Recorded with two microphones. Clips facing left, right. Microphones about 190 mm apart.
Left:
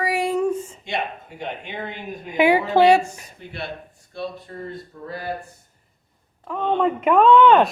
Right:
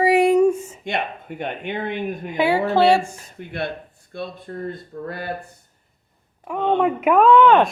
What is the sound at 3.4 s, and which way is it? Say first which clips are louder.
Speech: right 5 dB; 55° right (ahead or behind).